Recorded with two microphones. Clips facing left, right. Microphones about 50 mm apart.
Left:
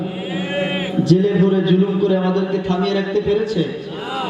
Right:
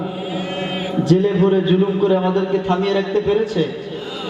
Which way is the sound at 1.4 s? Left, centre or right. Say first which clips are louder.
Even; right.